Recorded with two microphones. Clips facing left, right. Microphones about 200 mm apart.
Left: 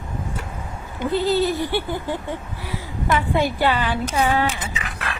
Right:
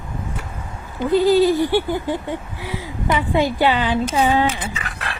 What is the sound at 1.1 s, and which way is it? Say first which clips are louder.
Speech: right 6 dB; 15° right (ahead or behind).